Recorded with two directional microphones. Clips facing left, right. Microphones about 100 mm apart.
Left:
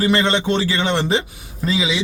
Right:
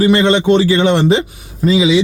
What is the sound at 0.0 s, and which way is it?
A man's voice, 15° right (ahead or behind).